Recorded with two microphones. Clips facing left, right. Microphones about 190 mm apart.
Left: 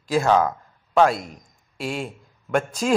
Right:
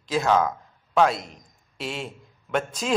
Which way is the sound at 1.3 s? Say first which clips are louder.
Left 4 dB; 45° left (ahead or behind).